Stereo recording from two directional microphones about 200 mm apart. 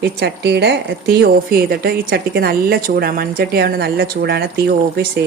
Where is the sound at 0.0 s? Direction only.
55° right (ahead or behind).